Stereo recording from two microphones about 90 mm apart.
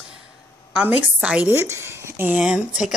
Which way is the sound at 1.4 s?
30° right (ahead or behind).